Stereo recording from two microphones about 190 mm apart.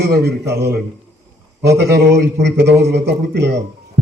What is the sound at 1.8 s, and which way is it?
A man's voice, 60° right (ahead or behind).